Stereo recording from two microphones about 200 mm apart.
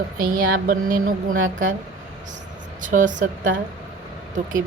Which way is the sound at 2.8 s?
40° right (ahead or behind).